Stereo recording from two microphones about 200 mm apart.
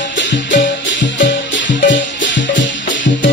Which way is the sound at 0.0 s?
65° left (ahead or behind).